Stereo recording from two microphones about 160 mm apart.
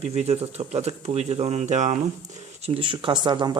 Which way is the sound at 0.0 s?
45° right (ahead or behind).